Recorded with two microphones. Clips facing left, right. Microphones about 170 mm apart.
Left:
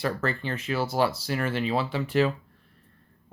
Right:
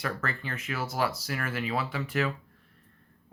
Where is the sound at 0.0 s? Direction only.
30° left (ahead or behind).